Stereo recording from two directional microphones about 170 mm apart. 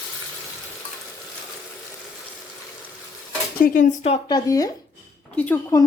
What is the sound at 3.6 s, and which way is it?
Speech, 50° left (ahead or behind).